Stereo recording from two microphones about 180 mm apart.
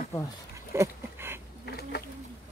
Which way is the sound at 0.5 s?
15° right (ahead or behind).